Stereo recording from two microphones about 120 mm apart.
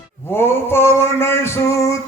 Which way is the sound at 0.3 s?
20° left (ahead or behind).